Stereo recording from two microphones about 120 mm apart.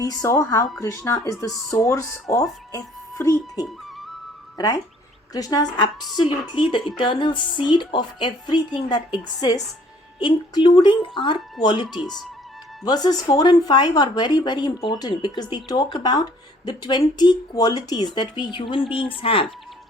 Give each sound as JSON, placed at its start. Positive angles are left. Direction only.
{"t": 0.0, "sound": "speech", "side_deg": 30}